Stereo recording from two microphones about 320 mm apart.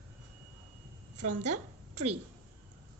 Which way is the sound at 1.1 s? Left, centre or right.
Right.